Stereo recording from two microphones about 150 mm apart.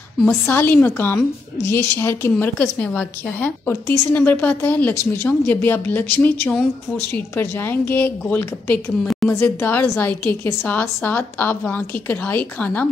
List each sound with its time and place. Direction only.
0.5 s a woman's voice: 10° left (ahead or behind)
9.0 s a woman's voice: centre (ahead or behind)
9.3 s a woman's voice: 15° left (ahead or behind)